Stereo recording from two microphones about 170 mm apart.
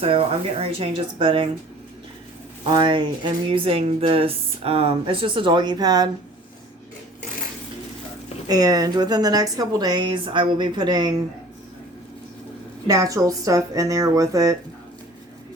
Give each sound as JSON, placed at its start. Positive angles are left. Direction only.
{"t": 0.0, "sound": "speech", "side_deg": -35}
{"t": 2.6, "sound": "speech", "side_deg": -30}
{"t": 8.4, "sound": "speech", "side_deg": -20}
{"t": 12.9, "sound": "speech", "side_deg": -20}